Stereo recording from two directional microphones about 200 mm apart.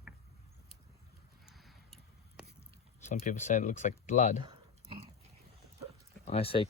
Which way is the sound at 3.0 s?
35° left (ahead or behind).